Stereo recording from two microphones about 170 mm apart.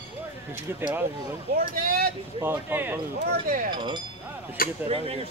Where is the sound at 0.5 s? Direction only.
15° right (ahead or behind).